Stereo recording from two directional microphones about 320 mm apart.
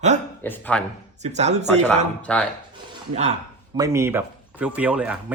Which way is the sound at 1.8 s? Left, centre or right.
Centre.